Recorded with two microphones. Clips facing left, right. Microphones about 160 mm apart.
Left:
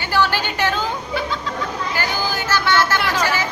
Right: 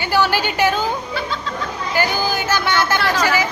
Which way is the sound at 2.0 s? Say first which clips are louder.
Right 6 dB; 15° right (ahead or behind).